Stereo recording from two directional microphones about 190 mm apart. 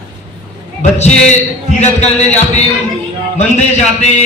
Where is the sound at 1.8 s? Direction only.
35° left (ahead or behind).